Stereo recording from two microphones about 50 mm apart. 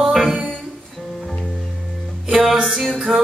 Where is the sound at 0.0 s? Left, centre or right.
Centre.